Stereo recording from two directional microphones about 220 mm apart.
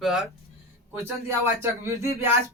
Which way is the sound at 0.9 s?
15° right (ahead or behind).